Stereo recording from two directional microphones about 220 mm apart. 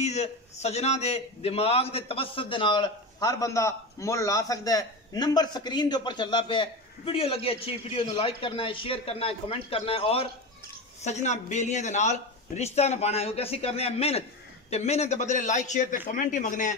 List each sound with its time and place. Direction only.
0.0 s a man's voice: 30° left (ahead or behind)